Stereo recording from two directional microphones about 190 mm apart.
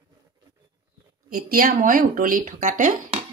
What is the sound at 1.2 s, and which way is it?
Speech, 50° right (ahead or behind).